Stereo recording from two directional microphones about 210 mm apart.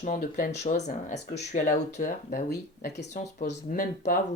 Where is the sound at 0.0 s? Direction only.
40° left (ahead or behind).